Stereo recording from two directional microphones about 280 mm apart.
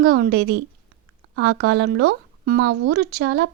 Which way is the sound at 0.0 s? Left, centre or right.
Right.